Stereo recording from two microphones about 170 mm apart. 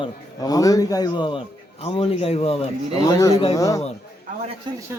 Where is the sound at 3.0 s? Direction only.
20° left (ahead or behind).